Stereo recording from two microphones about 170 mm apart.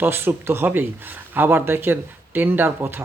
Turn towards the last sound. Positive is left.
turn(degrees=-10)  # may be behind; listen again after turning